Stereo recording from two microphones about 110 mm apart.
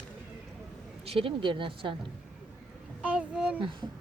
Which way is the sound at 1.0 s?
60° right (ahead or behind).